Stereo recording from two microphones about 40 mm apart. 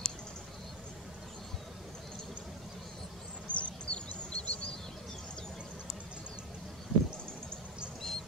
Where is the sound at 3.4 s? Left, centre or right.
Left.